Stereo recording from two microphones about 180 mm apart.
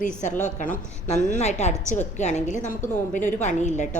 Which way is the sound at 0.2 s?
40° left (ahead or behind).